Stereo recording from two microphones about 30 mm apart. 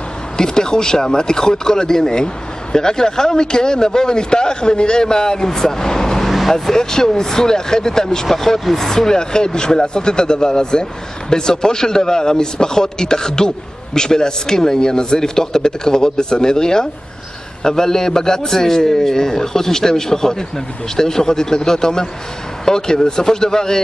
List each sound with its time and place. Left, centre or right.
0.4 s speech: left
6.2 s vehicle: centre
6.7 s speech: centre
8.3 s speech: centre; by 23.8 s left